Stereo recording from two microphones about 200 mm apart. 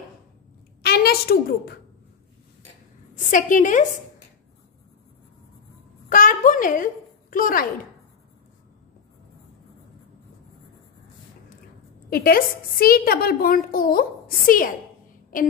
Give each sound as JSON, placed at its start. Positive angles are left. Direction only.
{"t": 0.8, "sound": "a woman's voice", "side_deg": 50}
{"t": 3.3, "sound": "a woman's voice", "side_deg": 40}
{"t": 6.0, "sound": "a woman's voice", "side_deg": 45}
{"t": 12.1, "sound": "a woman's voice", "side_deg": 45}